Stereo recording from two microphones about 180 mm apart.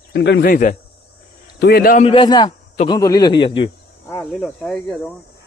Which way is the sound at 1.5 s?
60° left (ahead or behind).